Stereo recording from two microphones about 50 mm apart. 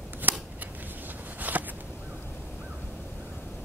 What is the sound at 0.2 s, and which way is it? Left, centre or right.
Scissors, right.